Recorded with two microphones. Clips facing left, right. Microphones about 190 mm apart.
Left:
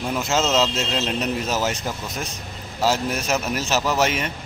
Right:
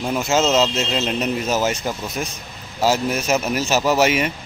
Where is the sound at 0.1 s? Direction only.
5° right (ahead or behind).